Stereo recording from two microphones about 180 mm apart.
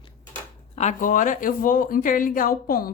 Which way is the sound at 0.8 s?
45° left (ahead or behind).